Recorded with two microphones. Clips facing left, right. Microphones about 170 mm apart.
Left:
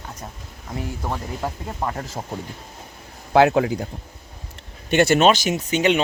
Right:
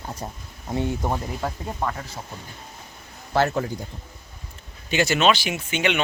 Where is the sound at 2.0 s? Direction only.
45° left (ahead or behind).